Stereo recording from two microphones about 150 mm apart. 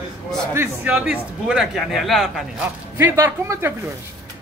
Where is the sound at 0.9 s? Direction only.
5° right (ahead or behind).